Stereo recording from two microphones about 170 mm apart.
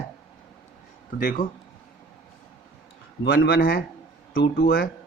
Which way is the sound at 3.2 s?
70° left (ahead or behind).